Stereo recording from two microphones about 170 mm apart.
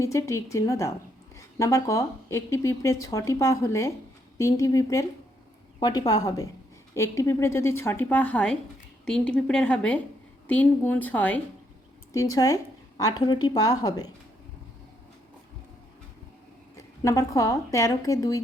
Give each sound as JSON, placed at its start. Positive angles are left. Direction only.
{"t": 0.0, "sound": "a woman's voice", "side_deg": 15}
{"t": 16.7, "sound": "speech", "side_deg": 15}